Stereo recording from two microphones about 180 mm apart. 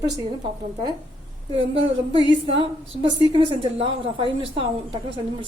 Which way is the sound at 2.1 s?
30° right (ahead or behind).